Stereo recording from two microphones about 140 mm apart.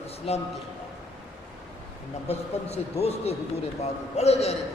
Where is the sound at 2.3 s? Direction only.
50° left (ahead or behind).